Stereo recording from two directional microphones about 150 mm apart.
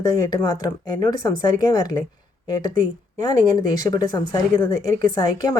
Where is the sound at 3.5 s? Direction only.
25° left (ahead or behind).